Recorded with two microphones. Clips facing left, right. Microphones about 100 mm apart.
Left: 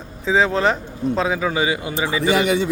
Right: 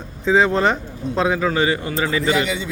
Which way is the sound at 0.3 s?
Centre (ahead or behind).